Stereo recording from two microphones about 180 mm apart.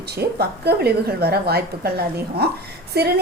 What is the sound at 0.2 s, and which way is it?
A woman's voice, 65° right (ahead or behind).